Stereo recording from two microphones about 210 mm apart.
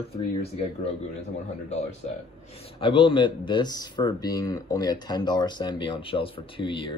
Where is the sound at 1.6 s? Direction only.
30° left (ahead or behind).